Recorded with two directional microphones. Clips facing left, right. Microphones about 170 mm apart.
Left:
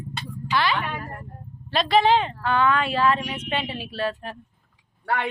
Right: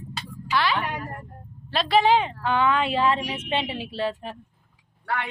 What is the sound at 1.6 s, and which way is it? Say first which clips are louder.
Speech: left 1 dB; 5° right (ahead or behind).